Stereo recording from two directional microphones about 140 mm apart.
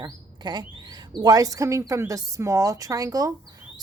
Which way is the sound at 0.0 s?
30° right (ahead or behind).